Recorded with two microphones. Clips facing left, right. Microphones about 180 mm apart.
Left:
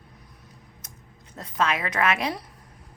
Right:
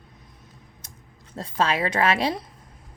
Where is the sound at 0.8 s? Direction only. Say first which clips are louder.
Even; 30° right (ahead or behind).